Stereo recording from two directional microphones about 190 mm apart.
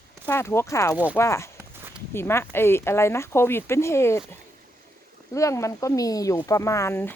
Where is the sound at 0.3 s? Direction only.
15° left (ahead or behind).